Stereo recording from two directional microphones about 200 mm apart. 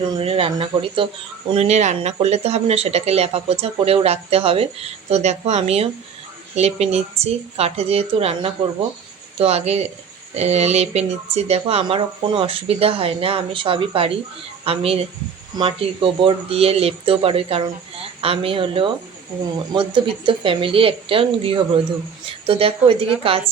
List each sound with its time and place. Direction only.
0.1 s speech: 30° right (ahead or behind)